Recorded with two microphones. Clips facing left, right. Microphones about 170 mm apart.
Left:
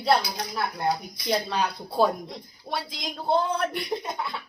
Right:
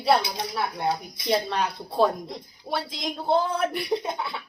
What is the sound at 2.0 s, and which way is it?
A woman's voice, 5° left (ahead or behind).